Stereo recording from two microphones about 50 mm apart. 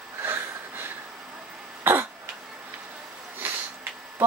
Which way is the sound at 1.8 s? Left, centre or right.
Right.